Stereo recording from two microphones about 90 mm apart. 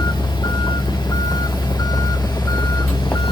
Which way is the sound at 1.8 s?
45° left (ahead or behind).